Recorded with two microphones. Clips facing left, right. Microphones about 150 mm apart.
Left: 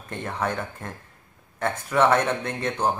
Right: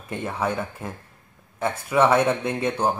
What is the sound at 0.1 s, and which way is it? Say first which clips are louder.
Speech: right 2 dB; 5° right (ahead or behind).